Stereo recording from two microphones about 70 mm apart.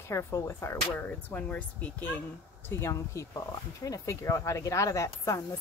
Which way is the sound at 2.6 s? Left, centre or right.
Left.